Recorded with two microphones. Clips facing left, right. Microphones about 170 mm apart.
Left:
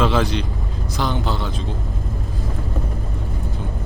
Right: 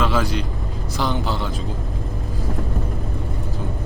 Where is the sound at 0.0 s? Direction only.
Centre (ahead or behind).